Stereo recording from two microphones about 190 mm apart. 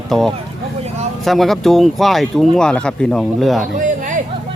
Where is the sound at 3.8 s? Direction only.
40° right (ahead or behind).